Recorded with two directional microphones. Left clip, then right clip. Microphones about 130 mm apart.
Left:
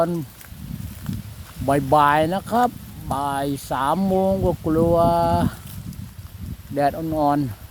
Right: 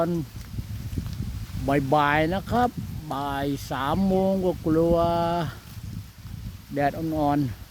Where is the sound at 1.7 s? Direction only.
15° left (ahead or behind).